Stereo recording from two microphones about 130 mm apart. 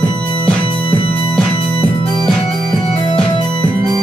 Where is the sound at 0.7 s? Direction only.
45° left (ahead or behind).